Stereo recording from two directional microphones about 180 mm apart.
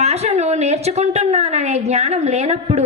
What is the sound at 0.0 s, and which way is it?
A woman's voice, 35° right (ahead or behind).